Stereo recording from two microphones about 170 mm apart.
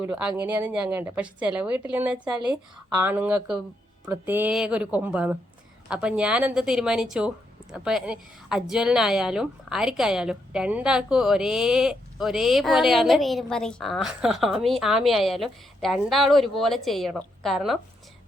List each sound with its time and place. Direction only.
0.0 s a woman's voice: 10° right (ahead or behind)